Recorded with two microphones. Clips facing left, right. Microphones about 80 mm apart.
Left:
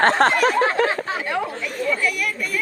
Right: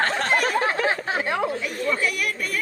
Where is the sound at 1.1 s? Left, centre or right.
Right.